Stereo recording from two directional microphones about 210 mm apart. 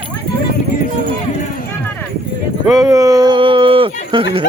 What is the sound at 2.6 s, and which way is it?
Speech, centre (ahead or behind).